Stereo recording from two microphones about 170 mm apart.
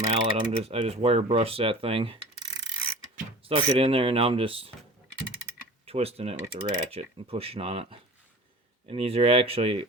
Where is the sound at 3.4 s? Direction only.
35° right (ahead or behind).